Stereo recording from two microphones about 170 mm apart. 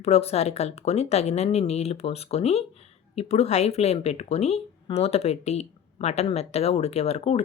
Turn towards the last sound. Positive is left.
turn(degrees=40)  # may be behind; listen again after turning